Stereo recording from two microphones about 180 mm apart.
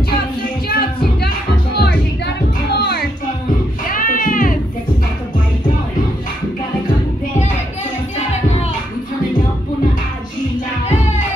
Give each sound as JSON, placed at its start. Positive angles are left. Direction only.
{"t": 0.7, "sound": "music", "side_deg": 60}
{"t": 3.9, "sound": "music", "side_deg": 50}